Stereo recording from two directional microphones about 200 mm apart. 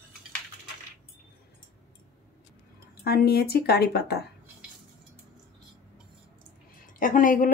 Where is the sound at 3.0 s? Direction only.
50° left (ahead or behind).